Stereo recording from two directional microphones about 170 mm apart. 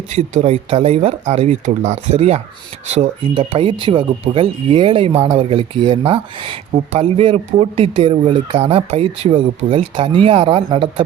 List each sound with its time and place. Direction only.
0.1 s speech: 40° right (ahead or behind)